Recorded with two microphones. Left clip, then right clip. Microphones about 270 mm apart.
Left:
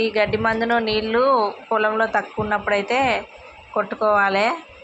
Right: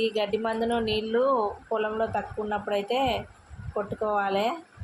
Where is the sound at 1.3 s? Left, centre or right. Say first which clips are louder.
Left 7 dB; left.